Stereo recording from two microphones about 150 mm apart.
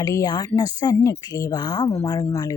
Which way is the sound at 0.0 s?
25° left (ahead or behind).